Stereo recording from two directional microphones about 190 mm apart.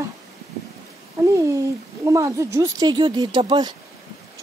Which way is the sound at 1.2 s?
15° right (ahead or behind).